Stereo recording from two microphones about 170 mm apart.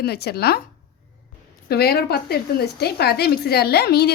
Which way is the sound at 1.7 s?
70° left (ahead or behind).